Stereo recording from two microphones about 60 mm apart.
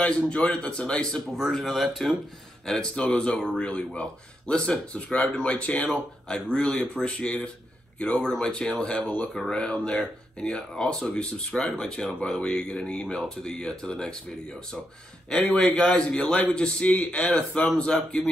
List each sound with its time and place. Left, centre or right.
0.0 s speech: centre
1.5 s speech: centre
3.0 s speech: centre
9.0 s speech: left
9.3 s speech: centre
15.5 s speech: centre